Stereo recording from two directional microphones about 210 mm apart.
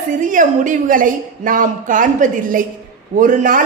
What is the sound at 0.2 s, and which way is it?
A woman's voice, 40° right (ahead or behind).